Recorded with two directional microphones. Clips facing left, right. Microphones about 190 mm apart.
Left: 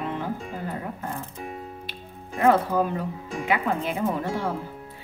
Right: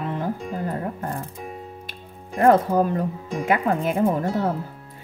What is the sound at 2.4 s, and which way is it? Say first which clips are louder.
Speech: right 4 dB; 45° right (ahead or behind).